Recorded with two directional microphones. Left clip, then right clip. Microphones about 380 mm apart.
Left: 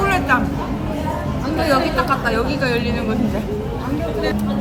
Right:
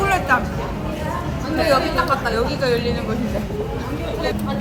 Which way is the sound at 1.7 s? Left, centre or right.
Centre.